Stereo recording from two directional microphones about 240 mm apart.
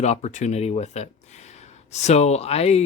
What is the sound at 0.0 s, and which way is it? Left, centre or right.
Speech, left.